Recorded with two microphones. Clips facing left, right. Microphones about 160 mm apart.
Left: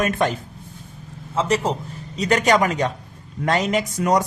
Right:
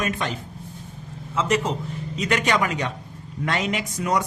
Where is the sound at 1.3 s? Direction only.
35° left (ahead or behind).